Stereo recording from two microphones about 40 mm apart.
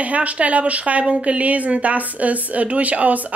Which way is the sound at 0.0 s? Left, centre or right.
Right.